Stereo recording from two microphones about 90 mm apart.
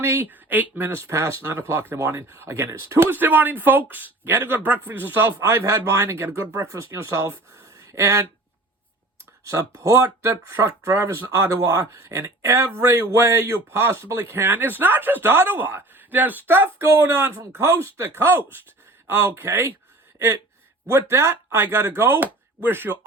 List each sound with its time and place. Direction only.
0.0 s speech: 25° right (ahead or behind)
6.5 s speech: 35° right (ahead or behind)
9.4 s speech: 35° right (ahead or behind)